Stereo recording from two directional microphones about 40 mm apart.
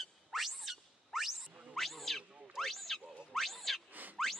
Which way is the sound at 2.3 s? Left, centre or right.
Right.